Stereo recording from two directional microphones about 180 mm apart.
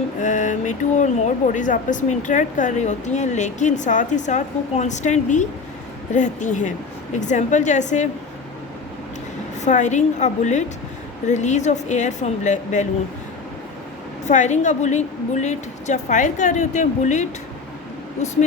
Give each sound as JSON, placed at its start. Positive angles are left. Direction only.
{"t": 0.2, "sound": "a woman's voice", "side_deg": 45}
{"t": 9.6, "sound": "a woman's voice", "side_deg": 40}
{"t": 14.3, "sound": "a woman's voice", "side_deg": 40}